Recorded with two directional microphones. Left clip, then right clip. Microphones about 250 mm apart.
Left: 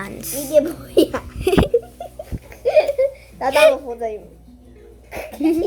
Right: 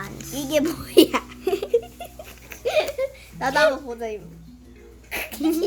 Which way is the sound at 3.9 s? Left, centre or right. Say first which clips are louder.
Left 5 dB; right.